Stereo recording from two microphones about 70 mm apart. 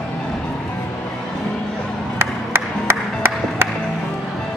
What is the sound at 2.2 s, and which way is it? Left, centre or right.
Music, right.